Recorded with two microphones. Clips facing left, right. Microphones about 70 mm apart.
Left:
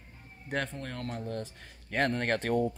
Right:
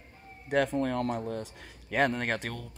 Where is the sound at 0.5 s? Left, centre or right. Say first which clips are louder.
Right 8 dB; centre.